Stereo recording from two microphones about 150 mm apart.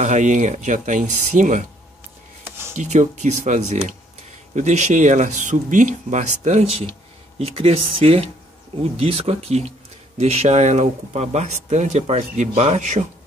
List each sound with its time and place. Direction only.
0.0 s speech: 55° right (ahead or behind)
2.4 s a sound: 15° right (ahead or behind)
2.7 s speech: 55° right (ahead or behind)